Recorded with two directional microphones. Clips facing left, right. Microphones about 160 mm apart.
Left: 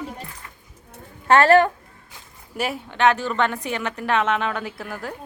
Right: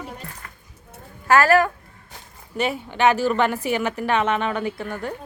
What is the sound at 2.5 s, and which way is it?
A woman's voice, centre (ahead or behind).